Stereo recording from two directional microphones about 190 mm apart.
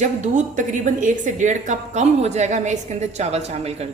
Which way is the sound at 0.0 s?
40° right (ahead or behind).